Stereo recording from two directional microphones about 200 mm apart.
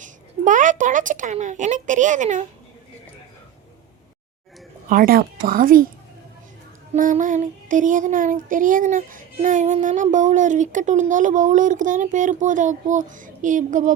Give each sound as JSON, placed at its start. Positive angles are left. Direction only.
{"t": 0.0, "sound": "a woman's voice", "side_deg": -40}
{"t": 4.9, "sound": "a child's voice", "side_deg": -45}
{"t": 6.9, "sound": "speech", "side_deg": -40}